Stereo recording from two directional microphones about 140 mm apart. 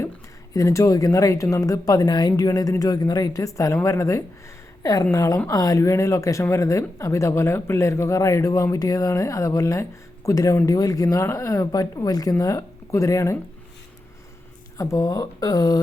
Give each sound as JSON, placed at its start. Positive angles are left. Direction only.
{"t": 0.5, "sound": "speech", "side_deg": 20}
{"t": 14.8, "sound": "speech", "side_deg": 25}